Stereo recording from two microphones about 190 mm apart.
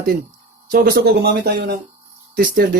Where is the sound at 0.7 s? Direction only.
50° right (ahead or behind).